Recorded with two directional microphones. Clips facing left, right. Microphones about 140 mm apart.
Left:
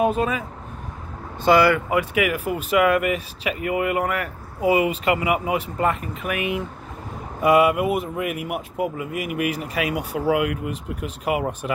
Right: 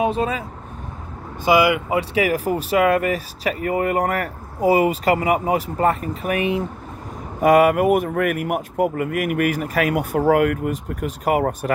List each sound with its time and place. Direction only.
0.0 s speech: 30° right (ahead or behind)
1.4 s speech: 15° right (ahead or behind)
2.0 s speech: 35° right (ahead or behind)